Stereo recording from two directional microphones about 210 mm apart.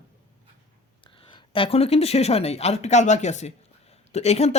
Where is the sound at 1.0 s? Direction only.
25° left (ahead or behind).